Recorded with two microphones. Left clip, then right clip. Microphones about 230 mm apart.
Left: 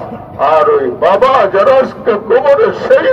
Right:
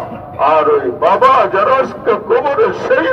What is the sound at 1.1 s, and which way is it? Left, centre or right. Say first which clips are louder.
A man's voice: left 1 dB; right.